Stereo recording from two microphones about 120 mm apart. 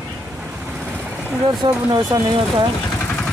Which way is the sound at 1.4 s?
35° right (ahead or behind).